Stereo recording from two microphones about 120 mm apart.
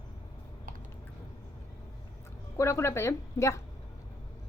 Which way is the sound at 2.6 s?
25° left (ahead or behind).